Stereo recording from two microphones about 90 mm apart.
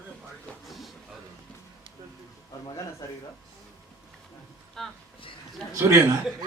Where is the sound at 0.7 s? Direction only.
Centre (ahead or behind).